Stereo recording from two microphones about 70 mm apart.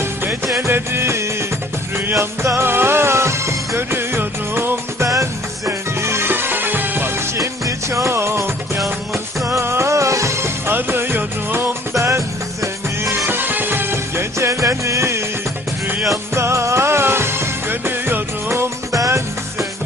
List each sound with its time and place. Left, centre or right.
0.0 s music: right
5.0 s music: right
5.6 s music: right
7.3 s music: right
11.9 s music: right
16.3 s music: right
18.9 s music: right